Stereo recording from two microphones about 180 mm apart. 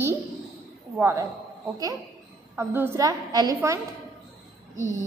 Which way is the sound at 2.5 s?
10° right (ahead or behind).